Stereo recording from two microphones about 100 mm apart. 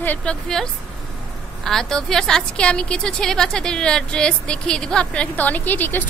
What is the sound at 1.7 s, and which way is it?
A woman's voice, 5° left (ahead or behind).